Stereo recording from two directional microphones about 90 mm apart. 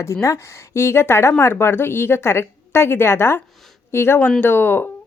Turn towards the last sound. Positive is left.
turn(degrees=25)  # may be behind; listen again after turning